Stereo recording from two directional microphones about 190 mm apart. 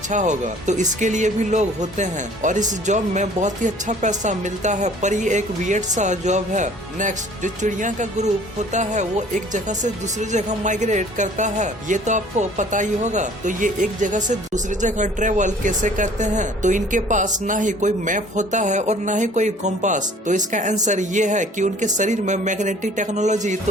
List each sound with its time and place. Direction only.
0.1 s speech: 40° right (ahead or behind)